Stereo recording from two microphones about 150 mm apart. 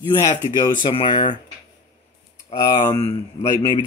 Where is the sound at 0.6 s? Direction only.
35° left (ahead or behind).